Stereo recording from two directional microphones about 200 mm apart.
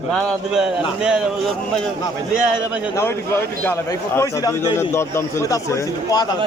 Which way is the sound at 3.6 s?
15° left (ahead or behind).